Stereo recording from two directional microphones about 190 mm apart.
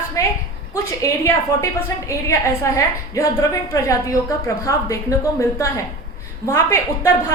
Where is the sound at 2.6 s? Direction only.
15° left (ahead or behind).